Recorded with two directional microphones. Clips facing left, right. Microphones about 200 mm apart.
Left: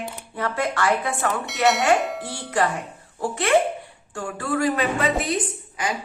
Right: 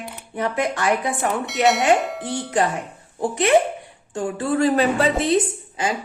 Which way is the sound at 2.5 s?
20° right (ahead or behind).